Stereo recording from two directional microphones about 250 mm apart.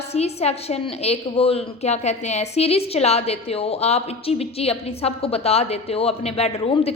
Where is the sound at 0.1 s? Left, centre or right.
Left.